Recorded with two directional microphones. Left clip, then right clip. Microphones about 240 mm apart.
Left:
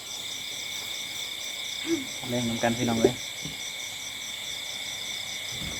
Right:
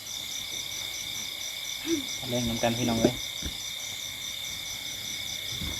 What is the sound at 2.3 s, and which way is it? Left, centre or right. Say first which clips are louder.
Speech: left 1 dB; centre.